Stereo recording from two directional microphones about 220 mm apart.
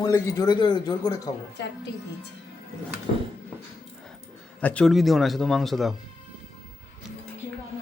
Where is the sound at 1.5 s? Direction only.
50° left (ahead or behind).